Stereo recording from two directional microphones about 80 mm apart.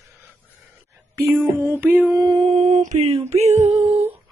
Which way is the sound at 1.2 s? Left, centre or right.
Right.